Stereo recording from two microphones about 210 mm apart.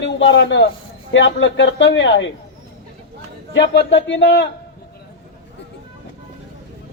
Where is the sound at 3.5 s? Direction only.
60° left (ahead or behind).